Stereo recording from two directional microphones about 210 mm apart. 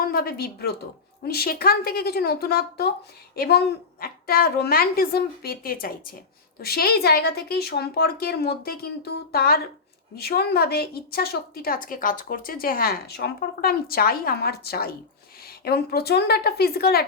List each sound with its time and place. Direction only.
0.0 s a woman's voice: 45° left (ahead or behind)